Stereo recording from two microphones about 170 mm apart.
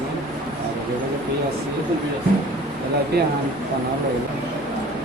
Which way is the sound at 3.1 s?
70° right (ahead or behind).